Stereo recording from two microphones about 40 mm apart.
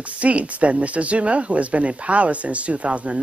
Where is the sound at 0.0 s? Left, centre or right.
Right.